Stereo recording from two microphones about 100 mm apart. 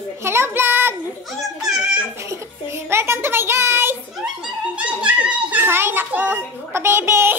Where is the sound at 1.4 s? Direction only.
5° right (ahead or behind).